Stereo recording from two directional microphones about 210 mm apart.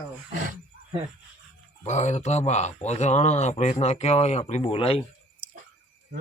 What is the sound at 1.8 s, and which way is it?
Speech, 35° left (ahead or behind).